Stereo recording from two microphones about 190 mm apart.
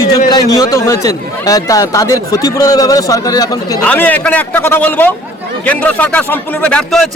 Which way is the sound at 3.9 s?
10° left (ahead or behind).